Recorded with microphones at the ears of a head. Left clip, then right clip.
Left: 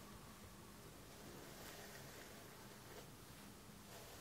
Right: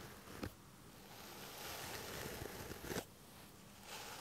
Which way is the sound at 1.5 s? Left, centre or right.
Right.